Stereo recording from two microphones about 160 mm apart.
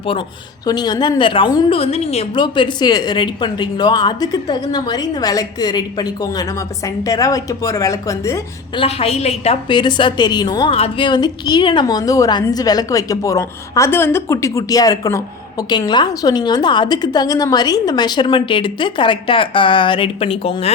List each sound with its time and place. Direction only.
0.6 s a woman's voice: 25° left (ahead or behind)
1.8 s a woman's voice: 40° left (ahead or behind)
2.4 s a woman's voice: 25° left (ahead or behind)
8.7 s a woman's voice: 35° left (ahead or behind)